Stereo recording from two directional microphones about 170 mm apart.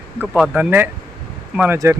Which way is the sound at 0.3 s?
5° right (ahead or behind).